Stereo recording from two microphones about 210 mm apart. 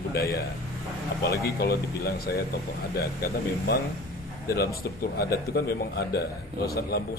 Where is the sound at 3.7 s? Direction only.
50° left (ahead or behind).